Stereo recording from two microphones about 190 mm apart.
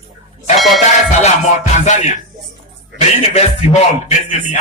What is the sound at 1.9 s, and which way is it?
Speech, 40° left (ahead or behind).